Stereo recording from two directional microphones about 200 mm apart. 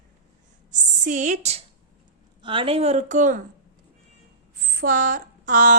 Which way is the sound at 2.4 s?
25° right (ahead or behind).